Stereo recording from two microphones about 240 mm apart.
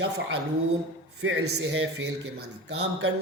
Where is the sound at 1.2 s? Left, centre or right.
Right.